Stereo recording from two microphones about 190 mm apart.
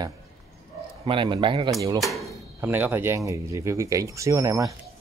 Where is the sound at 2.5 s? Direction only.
10° right (ahead or behind).